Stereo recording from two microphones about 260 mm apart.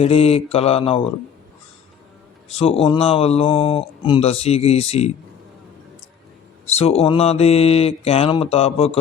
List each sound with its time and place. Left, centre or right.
0.0 s speech: left
2.5 s speech: left
6.7 s speech: left